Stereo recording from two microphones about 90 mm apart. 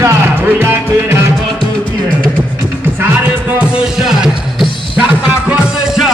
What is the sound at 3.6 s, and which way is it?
Music, 10° right (ahead or behind).